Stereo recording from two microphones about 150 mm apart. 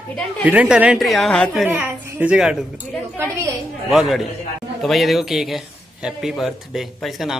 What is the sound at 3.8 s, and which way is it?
Speech, centre (ahead or behind).